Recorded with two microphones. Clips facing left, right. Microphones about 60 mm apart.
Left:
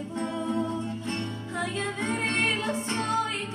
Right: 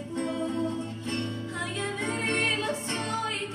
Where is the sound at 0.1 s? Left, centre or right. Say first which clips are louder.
Even; left.